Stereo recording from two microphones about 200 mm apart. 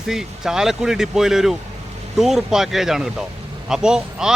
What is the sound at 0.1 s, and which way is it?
A man's voice, centre (ahead or behind).